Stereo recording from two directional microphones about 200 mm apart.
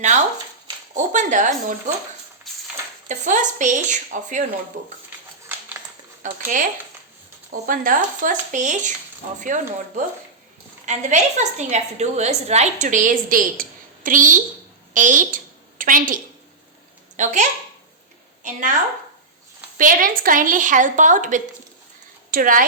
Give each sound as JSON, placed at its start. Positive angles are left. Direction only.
{"t": 0.9, "sound": "speech", "side_deg": -40}
{"t": 2.5, "sound": "a sound", "side_deg": 0}
{"t": 3.1, "sound": "a woman's voice", "side_deg": -40}
{"t": 6.4, "sound": "a woman's voice", "side_deg": -40}